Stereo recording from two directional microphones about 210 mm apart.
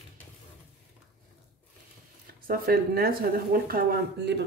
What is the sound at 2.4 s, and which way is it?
Speech, 45° right (ahead or behind).